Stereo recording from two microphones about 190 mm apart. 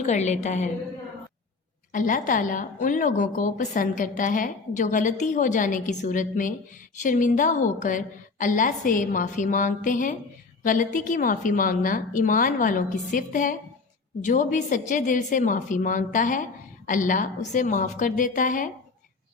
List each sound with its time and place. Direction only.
0.0 s a woman's voice: 35° left (ahead or behind)
1.9 s a woman's voice: 45° left (ahead or behind)